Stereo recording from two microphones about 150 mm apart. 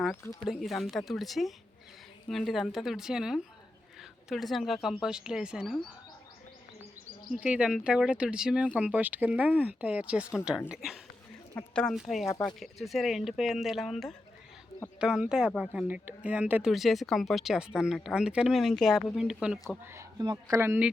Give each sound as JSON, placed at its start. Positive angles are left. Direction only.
{"t": 0.4, "sound": "speech", "side_deg": 0}
{"t": 7.3, "sound": "a woman's voice", "side_deg": -5}
{"t": 19.8, "sound": "speech", "side_deg": -20}